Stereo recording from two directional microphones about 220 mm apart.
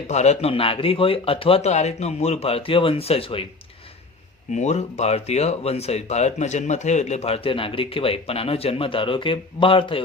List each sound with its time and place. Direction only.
0.1 s speech: 30° left (ahead or behind)
4.5 s speech: 30° left (ahead or behind)